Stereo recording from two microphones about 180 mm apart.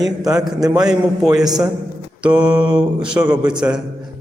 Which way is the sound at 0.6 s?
20° right (ahead or behind).